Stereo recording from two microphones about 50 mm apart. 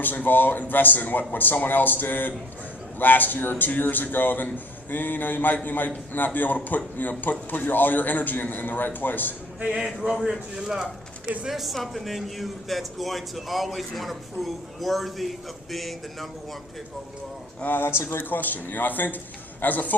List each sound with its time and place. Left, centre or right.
0.0 s a man's voice: left
9.6 s speech: centre
17.6 s a man's voice: left
18.3 s a man's voice: left